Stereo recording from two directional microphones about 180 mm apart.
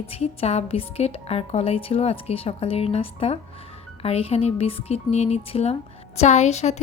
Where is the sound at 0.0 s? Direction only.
35° left (ahead or behind).